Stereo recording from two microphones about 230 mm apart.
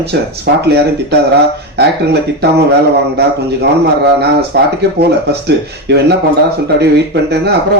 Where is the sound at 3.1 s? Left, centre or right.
Right.